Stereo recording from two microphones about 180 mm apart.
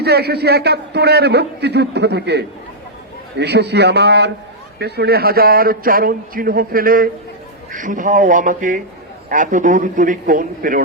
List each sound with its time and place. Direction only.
0.0 s a man's voice: 65° right (ahead or behind)